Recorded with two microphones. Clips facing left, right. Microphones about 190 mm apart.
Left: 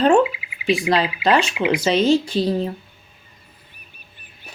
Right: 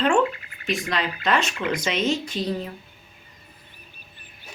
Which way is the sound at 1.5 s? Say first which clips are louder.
Left 6 dB; 10° left (ahead or behind).